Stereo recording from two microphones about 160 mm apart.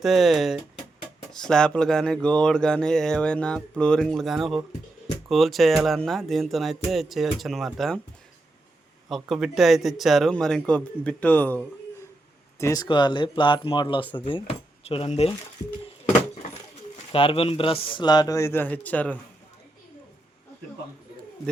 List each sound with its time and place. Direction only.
0.0 s speech: centre (ahead or behind)
9.0 s speech: centre (ahead or behind)
12.5 s speech: 20° left (ahead or behind); by 15.3 s 40° left (ahead or behind)
17.1 s speech: 35° left (ahead or behind); by 19.1 s 10° left (ahead or behind)